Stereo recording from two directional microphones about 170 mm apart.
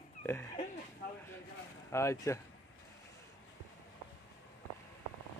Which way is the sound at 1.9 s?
15° left (ahead or behind).